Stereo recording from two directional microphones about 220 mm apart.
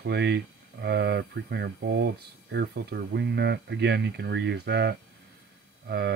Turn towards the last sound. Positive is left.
turn(degrees=-45)  # may be behind; listen again after turning